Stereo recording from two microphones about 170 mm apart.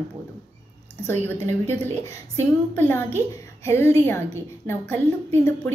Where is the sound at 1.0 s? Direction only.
15° left (ahead or behind).